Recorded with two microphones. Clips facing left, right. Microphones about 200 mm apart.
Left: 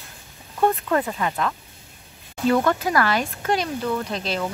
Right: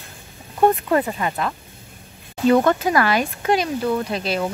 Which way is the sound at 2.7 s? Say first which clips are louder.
Right 3 dB; 20° right (ahead or behind).